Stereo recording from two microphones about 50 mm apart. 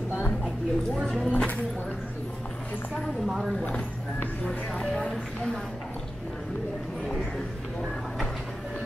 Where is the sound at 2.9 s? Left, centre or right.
Centre.